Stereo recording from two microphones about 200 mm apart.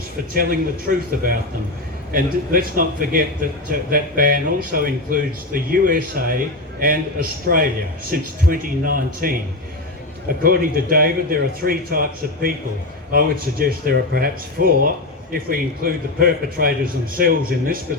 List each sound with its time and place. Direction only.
0.3 s speech: 45° right (ahead or behind)
10.4 s speech: 45° right (ahead or behind)